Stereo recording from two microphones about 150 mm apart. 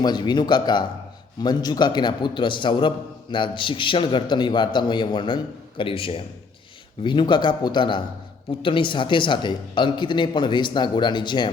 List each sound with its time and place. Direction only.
0.0 s a man's voice: 30° left (ahead or behind)